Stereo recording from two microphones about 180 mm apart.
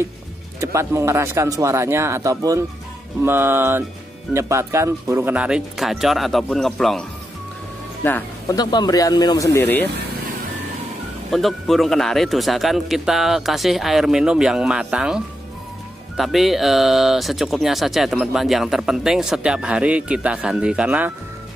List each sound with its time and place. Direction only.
0.6 s speech: 15° right (ahead or behind); by 8.5 s 10° left (ahead or behind)
8.5 s speech: 20° left (ahead or behind)
11.3 s speech: centre (ahead or behind)